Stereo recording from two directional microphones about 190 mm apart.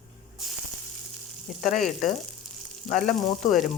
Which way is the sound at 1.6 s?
40° left (ahead or behind).